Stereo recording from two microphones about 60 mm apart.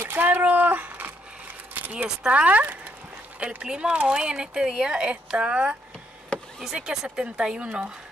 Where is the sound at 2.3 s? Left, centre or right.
Right.